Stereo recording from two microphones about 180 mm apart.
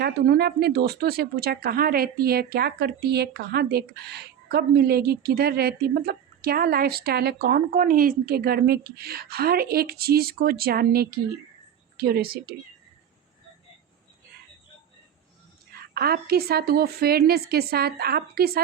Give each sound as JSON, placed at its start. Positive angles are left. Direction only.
{"t": 0.0, "sound": "speech", "side_deg": -65}
{"t": 16.0, "sound": "speech", "side_deg": -60}